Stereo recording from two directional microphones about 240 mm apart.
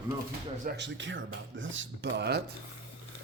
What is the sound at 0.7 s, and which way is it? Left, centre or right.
Speech, right.